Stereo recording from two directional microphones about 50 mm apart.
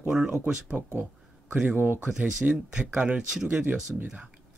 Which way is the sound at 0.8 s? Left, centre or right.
Right.